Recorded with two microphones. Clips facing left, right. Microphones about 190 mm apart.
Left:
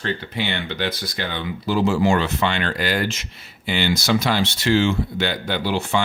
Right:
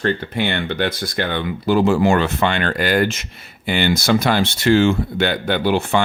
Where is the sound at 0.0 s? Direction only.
55° right (ahead or behind).